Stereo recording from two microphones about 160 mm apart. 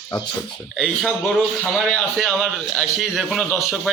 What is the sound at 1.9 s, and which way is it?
A man's voice, centre (ahead or behind).